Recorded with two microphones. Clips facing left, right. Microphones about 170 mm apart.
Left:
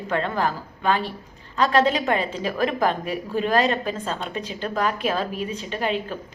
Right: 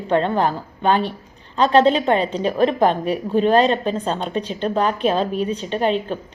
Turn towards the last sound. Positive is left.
turn(degrees=-30)  # may be behind; listen again after turning